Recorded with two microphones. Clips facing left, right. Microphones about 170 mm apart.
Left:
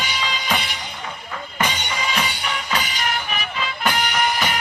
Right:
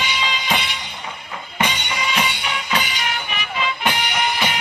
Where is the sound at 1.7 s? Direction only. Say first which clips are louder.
Right 1 dB; 40° left (ahead or behind).